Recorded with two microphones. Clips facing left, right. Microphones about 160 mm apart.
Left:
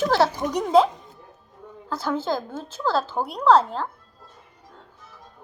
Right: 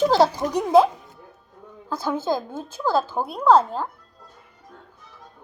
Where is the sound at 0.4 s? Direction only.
5° right (ahead or behind).